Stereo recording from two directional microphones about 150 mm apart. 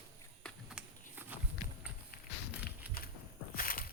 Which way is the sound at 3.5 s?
70° left (ahead or behind).